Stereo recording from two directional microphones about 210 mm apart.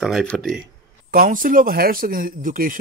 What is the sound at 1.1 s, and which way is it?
Speech, 45° right (ahead or behind).